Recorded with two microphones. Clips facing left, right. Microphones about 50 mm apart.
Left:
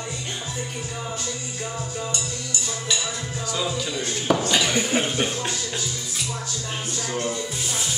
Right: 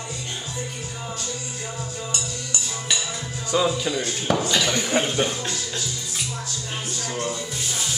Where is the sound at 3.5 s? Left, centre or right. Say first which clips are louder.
Right 6 dB; right.